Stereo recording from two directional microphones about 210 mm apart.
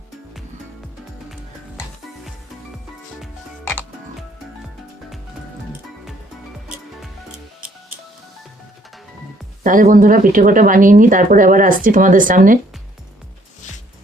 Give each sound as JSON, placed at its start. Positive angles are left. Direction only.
{"t": 3.6, "sound": "music", "side_deg": 10}
{"t": 9.6, "sound": "speech", "side_deg": -40}